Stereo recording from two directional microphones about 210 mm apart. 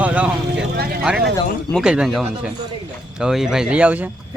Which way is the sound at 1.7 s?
Centre (ahead or behind).